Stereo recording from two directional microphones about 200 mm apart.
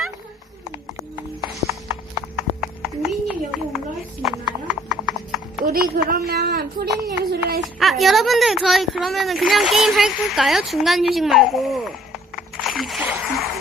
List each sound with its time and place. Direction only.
1.6 s clip-clop: 15° right (ahead or behind)
2.3 s a sound: centre (ahead or behind)
4.2 s clip-clop: centre (ahead or behind)
5.6 s speech: 45° right (ahead or behind)
7.6 s speech: centre (ahead or behind)